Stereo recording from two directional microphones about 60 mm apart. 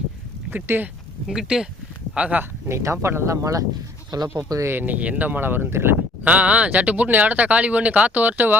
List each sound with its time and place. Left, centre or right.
0.5 s speech: right
1.3 s speech: centre
2.1 s speech: centre
2.4 s speech: right
3.4 s speech: right
4.1 s speech: right
4.6 s speech: right
5.4 s speech: right
6.2 s speech: right